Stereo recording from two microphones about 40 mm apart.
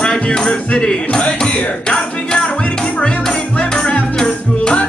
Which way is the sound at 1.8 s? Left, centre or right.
Centre.